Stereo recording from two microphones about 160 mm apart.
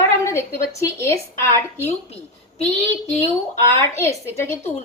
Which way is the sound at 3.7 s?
20° left (ahead or behind).